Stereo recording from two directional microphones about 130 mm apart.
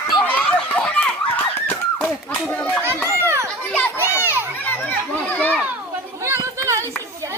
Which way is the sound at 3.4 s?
10° left (ahead or behind).